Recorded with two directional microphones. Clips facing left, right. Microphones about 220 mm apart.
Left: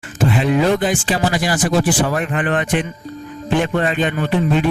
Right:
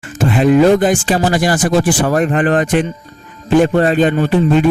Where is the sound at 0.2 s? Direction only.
45° right (ahead or behind).